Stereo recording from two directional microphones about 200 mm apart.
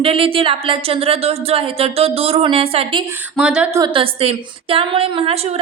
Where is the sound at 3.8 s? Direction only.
30° right (ahead or behind).